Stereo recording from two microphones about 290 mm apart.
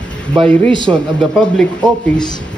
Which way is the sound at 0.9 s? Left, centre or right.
Centre.